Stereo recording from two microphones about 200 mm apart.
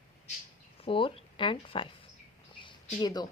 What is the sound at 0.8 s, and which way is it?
Speech, 25° left (ahead or behind).